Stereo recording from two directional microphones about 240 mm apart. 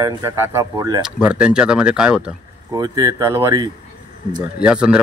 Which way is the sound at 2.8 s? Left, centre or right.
Centre.